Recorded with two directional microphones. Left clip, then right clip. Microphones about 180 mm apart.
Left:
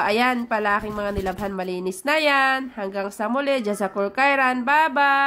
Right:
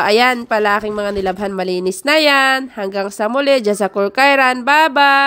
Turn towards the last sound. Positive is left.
turn(degrees=-40)  # may be behind; listen again after turning